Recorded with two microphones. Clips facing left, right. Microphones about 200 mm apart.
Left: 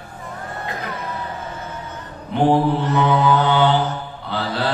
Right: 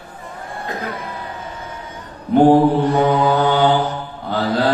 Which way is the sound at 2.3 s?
45° right (ahead or behind).